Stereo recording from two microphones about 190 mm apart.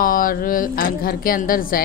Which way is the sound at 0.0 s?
45° left (ahead or behind).